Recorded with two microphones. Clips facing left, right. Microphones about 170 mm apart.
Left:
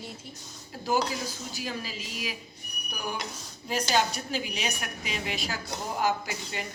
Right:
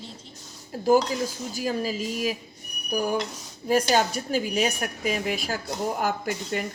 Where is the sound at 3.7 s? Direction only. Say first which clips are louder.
Right 5 dB; 50° right (ahead or behind).